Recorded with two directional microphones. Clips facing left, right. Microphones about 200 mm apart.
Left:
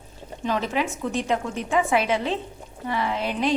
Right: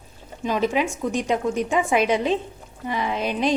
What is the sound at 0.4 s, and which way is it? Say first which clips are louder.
A woman's voice: right 3 dB; 15° right (ahead or behind).